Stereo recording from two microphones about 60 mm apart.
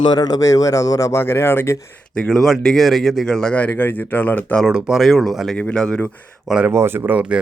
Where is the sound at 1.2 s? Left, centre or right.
Left.